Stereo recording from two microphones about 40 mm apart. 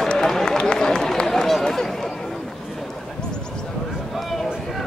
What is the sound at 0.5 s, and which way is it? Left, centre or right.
Run, centre.